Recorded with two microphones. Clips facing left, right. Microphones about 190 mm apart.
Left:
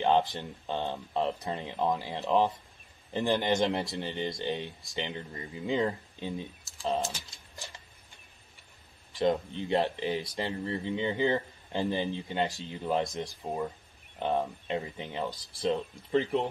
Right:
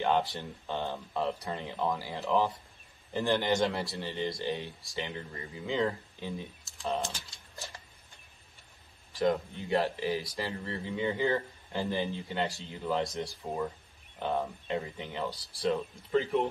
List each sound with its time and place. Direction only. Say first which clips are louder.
0.0 s speech: left 3 dB; 20° left (ahead or behind)
9.2 s speech: left 1 dB; 20° left (ahead or behind)